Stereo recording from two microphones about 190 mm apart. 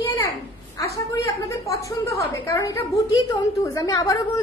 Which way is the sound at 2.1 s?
15° left (ahead or behind).